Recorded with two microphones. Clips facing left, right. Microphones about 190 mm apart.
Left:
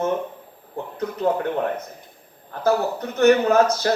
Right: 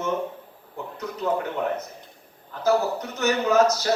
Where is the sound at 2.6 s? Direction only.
55° left (ahead or behind).